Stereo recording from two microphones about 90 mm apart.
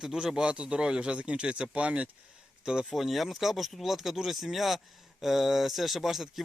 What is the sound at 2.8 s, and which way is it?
Speech, 5° right (ahead or behind).